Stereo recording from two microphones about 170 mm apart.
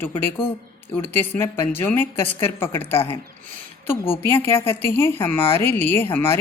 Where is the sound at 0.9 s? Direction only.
10° left (ahead or behind).